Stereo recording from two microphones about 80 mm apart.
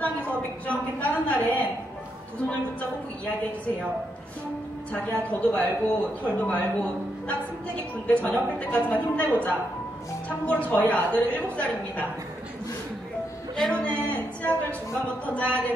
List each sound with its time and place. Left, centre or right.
0.0 s a sound: centre
5.3 s speech: centre
13.6 s a man's voice: centre
13.8 s speech: centre